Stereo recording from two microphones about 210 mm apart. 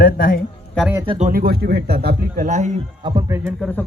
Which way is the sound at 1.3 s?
45° right (ahead or behind).